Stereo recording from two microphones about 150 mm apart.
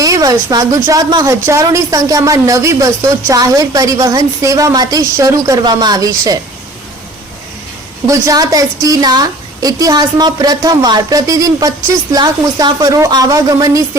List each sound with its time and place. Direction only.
0.0 s speech: 25° right (ahead or behind)
8.0 s speech: 20° right (ahead or behind)